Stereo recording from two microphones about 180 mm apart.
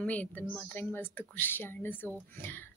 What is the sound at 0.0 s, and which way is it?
A woman's voice, 10° left (ahead or behind).